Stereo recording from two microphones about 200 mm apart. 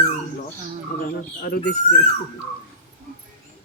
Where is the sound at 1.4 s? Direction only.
45° left (ahead or behind).